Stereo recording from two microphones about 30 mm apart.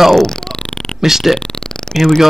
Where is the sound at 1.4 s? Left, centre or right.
Left.